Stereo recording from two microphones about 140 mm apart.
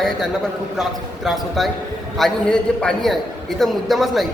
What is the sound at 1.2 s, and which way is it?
A man's voice, centre (ahead or behind).